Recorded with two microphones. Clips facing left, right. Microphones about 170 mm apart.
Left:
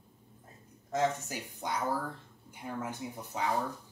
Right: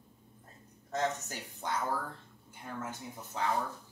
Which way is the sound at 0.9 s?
10° left (ahead or behind).